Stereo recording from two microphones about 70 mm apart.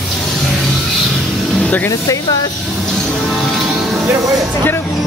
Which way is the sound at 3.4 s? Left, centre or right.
Centre.